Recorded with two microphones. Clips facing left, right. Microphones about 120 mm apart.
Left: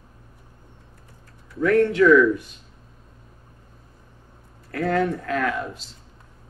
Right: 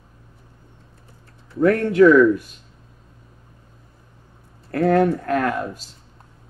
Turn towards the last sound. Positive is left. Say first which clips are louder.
# right 3 dB
turn(degrees=-45)  # may be behind; listen again after turning